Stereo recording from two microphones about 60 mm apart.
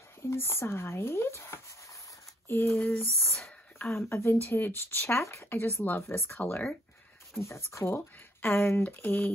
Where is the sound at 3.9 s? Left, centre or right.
Left.